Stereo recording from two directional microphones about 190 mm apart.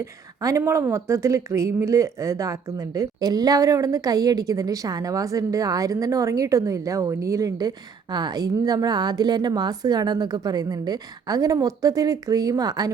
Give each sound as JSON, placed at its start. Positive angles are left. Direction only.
{"t": 0.4, "sound": "a woman's voice", "side_deg": -15}